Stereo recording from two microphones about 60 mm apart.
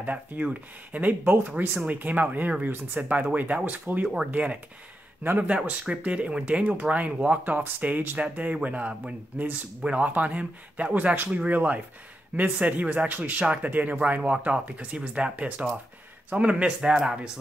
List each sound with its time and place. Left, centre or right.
0.0 s speech: right
5.9 s speech: right